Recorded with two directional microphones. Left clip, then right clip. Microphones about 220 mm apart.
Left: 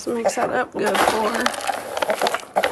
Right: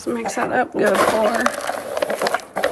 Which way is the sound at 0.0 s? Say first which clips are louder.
Left 2 dB; 5° left (ahead or behind).